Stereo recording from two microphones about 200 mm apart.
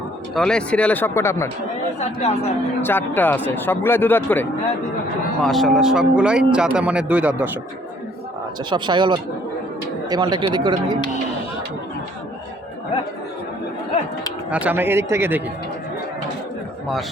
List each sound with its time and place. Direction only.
0.3 s speech: 5° left (ahead or behind)
2.8 s speech: 10° left (ahead or behind); by 7.5 s 5° right (ahead or behind)
8.7 s speech: 25° right (ahead or behind)
14.5 s a man's voice: 10° right (ahead or behind)